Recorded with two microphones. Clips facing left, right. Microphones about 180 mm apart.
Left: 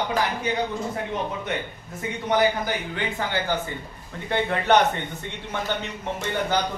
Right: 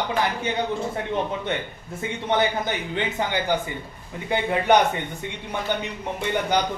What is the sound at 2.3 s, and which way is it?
A man's voice, 25° right (ahead or behind).